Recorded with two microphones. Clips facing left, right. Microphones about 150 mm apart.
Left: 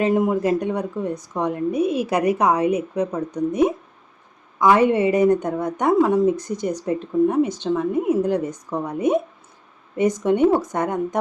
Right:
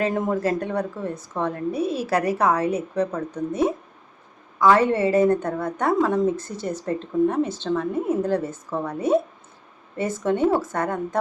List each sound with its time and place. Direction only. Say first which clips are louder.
0.0 s a woman's voice: left 4 dB; 10° left (ahead or behind)